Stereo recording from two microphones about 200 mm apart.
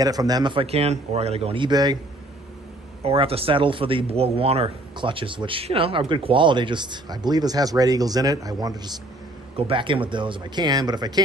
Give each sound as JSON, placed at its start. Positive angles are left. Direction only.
{"t": 0.0, "sound": "speech", "side_deg": -20}
{"t": 3.0, "sound": "speech", "side_deg": -30}